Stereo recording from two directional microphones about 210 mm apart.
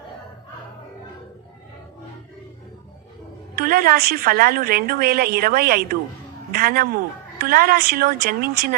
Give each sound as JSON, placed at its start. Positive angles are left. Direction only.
{"t": 3.6, "sound": "a woman's voice", "side_deg": -45}